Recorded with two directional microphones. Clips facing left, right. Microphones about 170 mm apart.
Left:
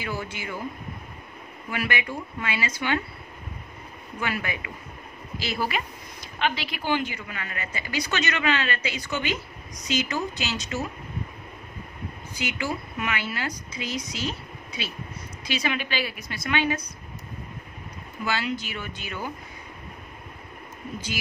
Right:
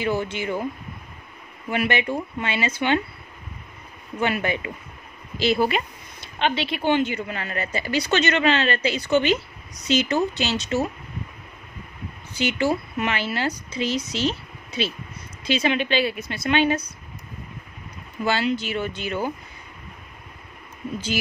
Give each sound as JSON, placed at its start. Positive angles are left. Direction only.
{"t": 0.0, "sound": "a woman's voice", "side_deg": -25}
{"t": 1.7, "sound": "a woman's voice", "side_deg": -25}
{"t": 4.2, "sound": "a woman's voice", "side_deg": -25}
{"t": 12.4, "sound": "a woman's voice", "side_deg": -30}
{"t": 18.2, "sound": "a woman's voice", "side_deg": -30}